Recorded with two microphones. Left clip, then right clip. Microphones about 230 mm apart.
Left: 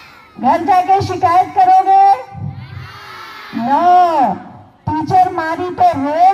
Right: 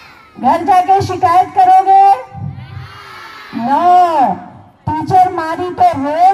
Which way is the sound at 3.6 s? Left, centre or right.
Right.